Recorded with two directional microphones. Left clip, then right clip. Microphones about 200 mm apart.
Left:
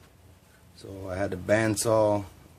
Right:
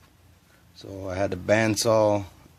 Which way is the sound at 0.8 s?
35° right (ahead or behind).